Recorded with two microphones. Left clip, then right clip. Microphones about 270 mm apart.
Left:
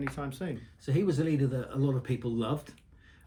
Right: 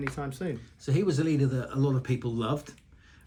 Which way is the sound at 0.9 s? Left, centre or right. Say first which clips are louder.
Right 2 dB; right.